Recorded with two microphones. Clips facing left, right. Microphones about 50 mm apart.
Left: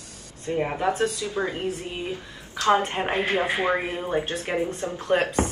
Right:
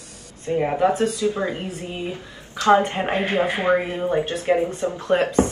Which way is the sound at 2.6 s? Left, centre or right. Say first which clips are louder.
Right 4 dB; right.